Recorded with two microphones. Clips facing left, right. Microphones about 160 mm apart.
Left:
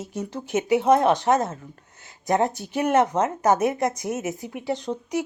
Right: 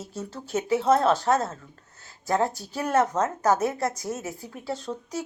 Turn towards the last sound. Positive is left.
turn(degrees=20)  # may be behind; listen again after turning